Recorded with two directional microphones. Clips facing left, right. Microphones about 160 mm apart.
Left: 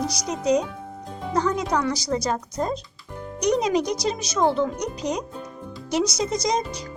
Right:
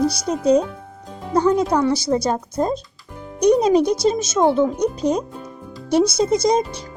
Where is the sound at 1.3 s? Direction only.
30° right (ahead or behind).